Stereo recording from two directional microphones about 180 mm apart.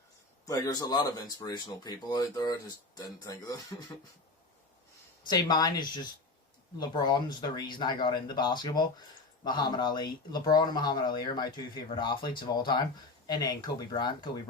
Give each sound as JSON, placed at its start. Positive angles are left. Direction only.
{"t": 0.4, "sound": "speech", "side_deg": 20}
{"t": 5.2, "sound": "speech", "side_deg": 25}